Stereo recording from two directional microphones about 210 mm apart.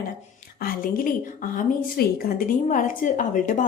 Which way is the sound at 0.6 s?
40° left (ahead or behind).